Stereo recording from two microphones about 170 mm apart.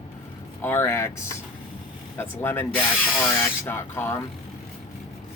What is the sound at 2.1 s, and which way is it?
Speech, 15° left (ahead or behind).